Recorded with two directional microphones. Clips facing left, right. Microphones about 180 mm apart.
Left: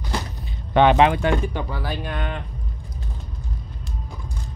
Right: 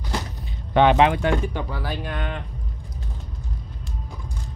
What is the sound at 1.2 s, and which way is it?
Speech, 25° left (ahead or behind).